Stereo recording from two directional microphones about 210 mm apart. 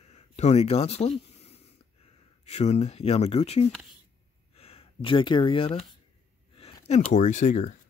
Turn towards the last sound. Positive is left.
turn(degrees=35)  # may be behind; listen again after turning